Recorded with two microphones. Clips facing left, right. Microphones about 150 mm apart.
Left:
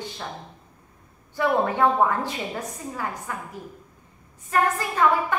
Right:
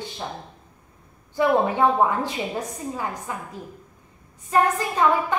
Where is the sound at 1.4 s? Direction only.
15° right (ahead or behind).